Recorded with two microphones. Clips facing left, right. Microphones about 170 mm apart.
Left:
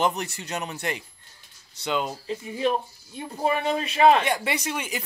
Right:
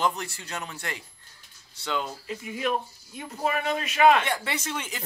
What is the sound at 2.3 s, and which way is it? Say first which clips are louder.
Speech: left 3 dB; 30° left (ahead or behind).